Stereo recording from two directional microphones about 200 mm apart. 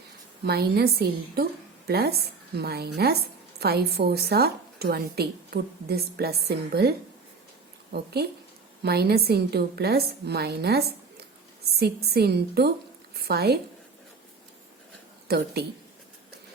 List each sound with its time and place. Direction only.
0.4 s a woman's voice: 50° right (ahead or behind)
7.9 s a woman's voice: 55° right (ahead or behind)
15.3 s a woman's voice: 55° right (ahead or behind)